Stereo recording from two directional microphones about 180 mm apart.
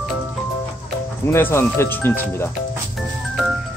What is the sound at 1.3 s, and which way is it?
Speech, 15° left (ahead or behind).